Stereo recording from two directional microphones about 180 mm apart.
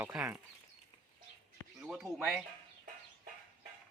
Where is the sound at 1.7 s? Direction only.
Centre (ahead or behind).